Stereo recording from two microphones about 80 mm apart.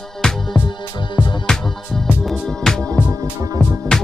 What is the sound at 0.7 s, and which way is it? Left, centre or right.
Music, left.